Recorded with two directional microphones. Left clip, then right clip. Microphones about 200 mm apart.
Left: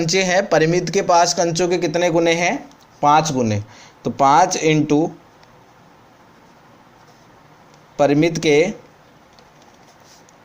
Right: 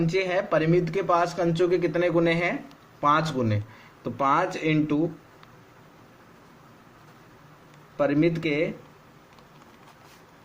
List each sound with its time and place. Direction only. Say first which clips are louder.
0.0 s speech: left 8 dB; 40° left (ahead or behind)
7.9 s speech: left 7 dB; 35° left (ahead or behind)